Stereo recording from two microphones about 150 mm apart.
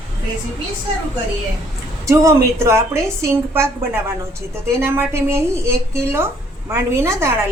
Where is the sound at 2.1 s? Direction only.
20° right (ahead or behind).